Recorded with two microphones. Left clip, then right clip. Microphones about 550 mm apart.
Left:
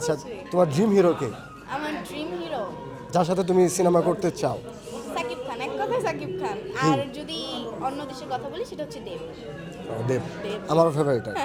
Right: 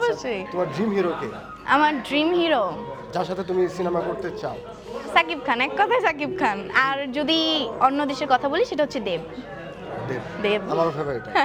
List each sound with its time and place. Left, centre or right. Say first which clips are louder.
0.5 s a man's voice: left 6 dB; left
1.6 s a woman's voice: right 12 dB; right
3.1 s a man's voice: left 4 dB; left
5.1 s a woman's voice: right 10 dB; right
10.7 s a man's voice: left 2 dB; left